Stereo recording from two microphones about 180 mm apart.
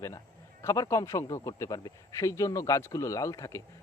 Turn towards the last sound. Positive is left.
turn(degrees=15)  # may be behind; listen again after turning